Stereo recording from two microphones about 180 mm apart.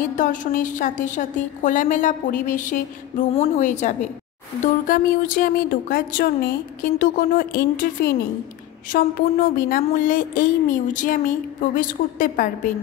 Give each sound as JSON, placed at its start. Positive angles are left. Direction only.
{"t": 0.1, "sound": "a woman's voice", "side_deg": 45}